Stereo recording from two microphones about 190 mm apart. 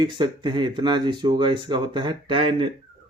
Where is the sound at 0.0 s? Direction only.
25° right (ahead or behind).